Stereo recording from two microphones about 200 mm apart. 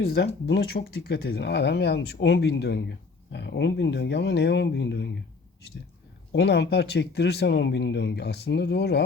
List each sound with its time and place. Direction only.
0.0 s speech: 55° left (ahead or behind)
6.3 s speech: 55° left (ahead or behind)